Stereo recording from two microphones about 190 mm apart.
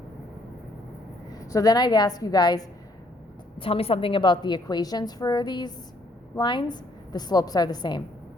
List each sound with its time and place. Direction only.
1.3 s a woman's voice: 20° left (ahead or behind)